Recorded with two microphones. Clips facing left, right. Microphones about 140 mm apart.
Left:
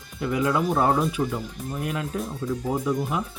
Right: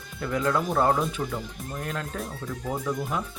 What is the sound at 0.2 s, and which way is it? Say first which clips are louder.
Speech: left 2 dB; 10° left (ahead or behind).